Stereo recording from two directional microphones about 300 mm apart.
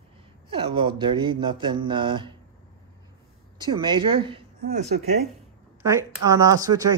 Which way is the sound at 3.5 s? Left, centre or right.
Centre.